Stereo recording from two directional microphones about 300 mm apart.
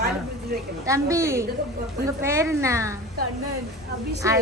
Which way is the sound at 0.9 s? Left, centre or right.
Centre.